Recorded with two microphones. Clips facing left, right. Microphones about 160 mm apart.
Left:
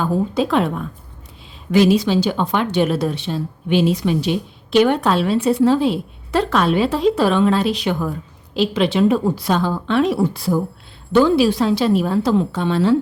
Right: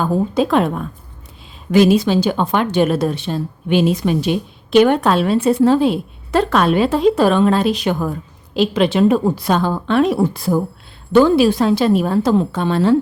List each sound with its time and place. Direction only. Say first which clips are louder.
0.0 s speech: right 2 dB; 50° right (ahead or behind)